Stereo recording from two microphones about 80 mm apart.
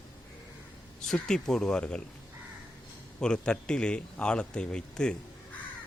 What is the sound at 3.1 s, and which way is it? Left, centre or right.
Speech, centre.